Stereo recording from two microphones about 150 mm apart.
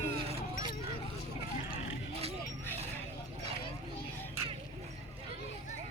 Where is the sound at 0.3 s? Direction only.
40° right (ahead or behind).